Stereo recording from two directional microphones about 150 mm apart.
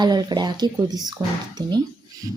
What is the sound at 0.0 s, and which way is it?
Speech, 30° right (ahead or behind).